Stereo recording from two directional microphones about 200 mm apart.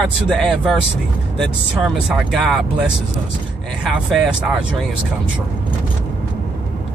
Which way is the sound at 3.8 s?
Centre (ahead or behind).